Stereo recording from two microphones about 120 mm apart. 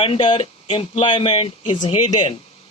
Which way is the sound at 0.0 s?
45° left (ahead or behind).